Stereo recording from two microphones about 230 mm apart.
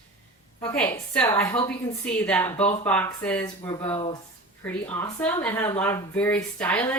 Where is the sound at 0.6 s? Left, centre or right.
Centre.